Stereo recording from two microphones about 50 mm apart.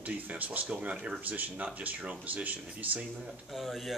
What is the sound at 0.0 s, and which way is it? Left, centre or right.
Speech, right.